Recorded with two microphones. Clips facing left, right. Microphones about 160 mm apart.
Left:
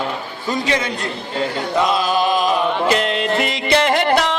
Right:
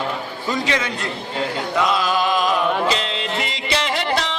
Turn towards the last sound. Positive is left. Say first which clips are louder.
# left 6 dB
turn(degrees=50)  # may be behind; listen again after turning